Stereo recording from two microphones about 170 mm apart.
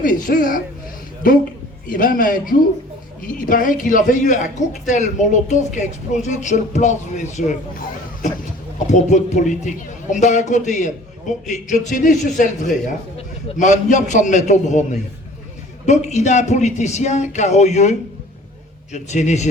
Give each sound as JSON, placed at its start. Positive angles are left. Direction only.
{"t": 0.0, "sound": "a man's voice", "side_deg": 55}
{"t": 18.9, "sound": "a man's voice", "side_deg": 45}